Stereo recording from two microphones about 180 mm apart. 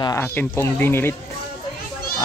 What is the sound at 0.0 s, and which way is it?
Speech, 15° left (ahead or behind).